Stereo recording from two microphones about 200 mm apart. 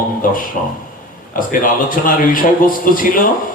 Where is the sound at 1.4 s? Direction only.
45° left (ahead or behind).